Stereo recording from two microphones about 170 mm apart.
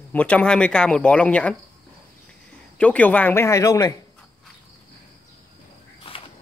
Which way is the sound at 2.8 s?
10° left (ahead or behind).